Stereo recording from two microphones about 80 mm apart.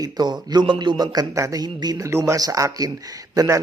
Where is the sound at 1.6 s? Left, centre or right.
Right.